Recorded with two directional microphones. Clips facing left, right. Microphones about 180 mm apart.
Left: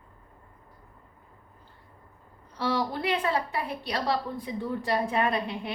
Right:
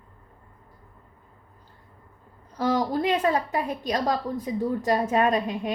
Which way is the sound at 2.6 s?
40° right (ahead or behind).